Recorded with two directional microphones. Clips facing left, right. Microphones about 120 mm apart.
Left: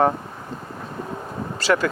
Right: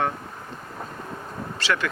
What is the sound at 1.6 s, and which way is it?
Speech, 40° left (ahead or behind).